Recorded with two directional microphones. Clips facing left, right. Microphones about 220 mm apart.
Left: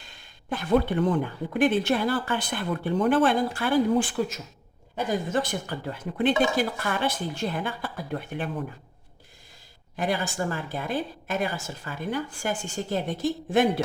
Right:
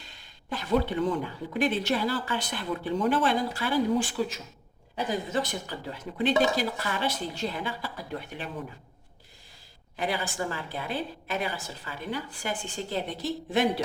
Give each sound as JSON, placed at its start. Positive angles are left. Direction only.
{"t": 0.0, "sound": "speech", "side_deg": 50}
{"t": 10.0, "sound": "speech", "side_deg": 45}